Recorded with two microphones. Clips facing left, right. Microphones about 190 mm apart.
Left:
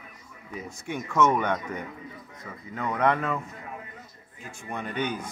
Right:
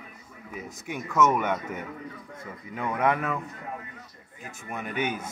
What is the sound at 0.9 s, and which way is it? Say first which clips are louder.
Speech: even; 5° right (ahead or behind).